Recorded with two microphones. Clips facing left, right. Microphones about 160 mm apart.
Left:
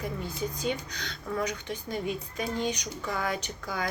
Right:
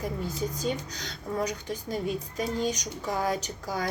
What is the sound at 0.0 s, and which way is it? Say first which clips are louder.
Speech: right 2 dB; 40° right (ahead or behind).